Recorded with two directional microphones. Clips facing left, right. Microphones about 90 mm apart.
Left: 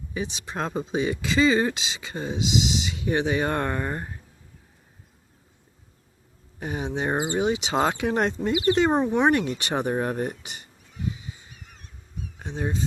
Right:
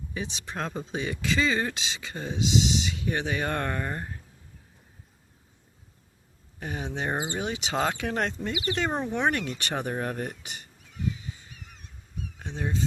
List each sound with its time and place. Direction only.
0.1 s speech: 10° left (ahead or behind)
6.6 s speech: 15° left (ahead or behind)
12.4 s a sound: 20° left (ahead or behind)